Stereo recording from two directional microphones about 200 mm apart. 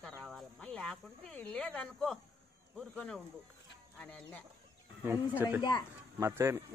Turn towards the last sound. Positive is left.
turn(degrees=-10)  # may be behind; listen again after turning